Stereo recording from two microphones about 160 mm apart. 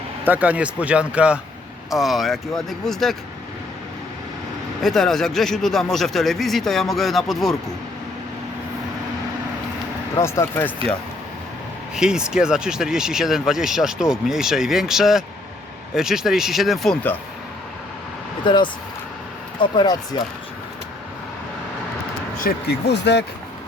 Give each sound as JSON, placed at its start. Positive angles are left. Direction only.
{"t": 0.3, "sound": "speech", "side_deg": -10}
{"t": 4.8, "sound": "speech", "side_deg": 0}
{"t": 10.2, "sound": "speech", "side_deg": 15}
{"t": 11.9, "sound": "speech", "side_deg": -5}
{"t": 18.4, "sound": "speech", "side_deg": 30}
{"t": 22.4, "sound": "speech", "side_deg": 80}